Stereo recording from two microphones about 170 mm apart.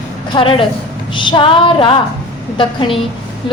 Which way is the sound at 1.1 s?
30° left (ahead or behind).